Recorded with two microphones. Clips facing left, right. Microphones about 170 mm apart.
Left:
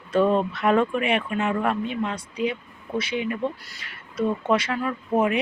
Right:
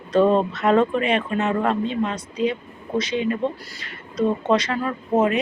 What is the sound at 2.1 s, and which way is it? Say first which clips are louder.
Speech: right 3 dB; 10° left (ahead or behind).